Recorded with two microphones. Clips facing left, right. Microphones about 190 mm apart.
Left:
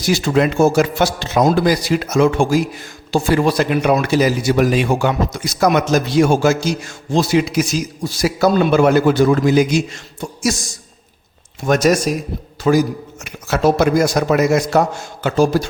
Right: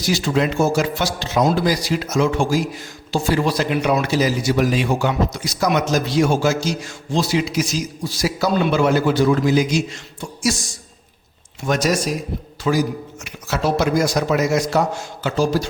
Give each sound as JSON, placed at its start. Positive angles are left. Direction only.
{"t": 0.0, "sound": "speech", "side_deg": 55}
{"t": 11.6, "sound": "a man's voice", "side_deg": 50}